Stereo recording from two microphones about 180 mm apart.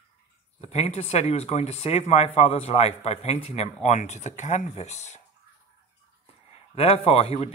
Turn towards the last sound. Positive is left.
turn(degrees=35)  # may be behind; listen again after turning